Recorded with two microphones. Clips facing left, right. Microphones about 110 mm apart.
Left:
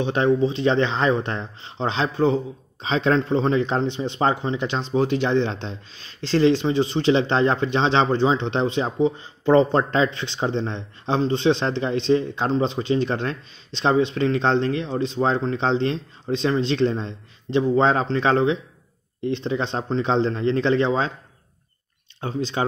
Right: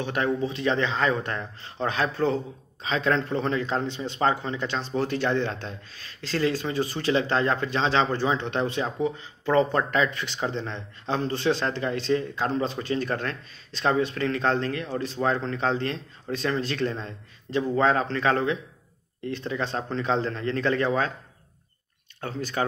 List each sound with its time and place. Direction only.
0.0 s speech: 25° left (ahead or behind)
22.2 s speech: 20° left (ahead or behind)